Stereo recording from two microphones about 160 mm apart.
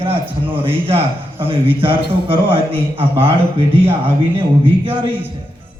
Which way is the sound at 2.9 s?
15° right (ahead or behind).